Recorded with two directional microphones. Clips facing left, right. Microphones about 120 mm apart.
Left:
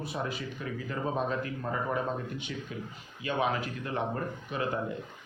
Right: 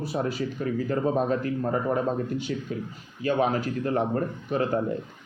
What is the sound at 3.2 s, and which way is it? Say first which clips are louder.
Speech: right 6 dB; 40° right (ahead or behind).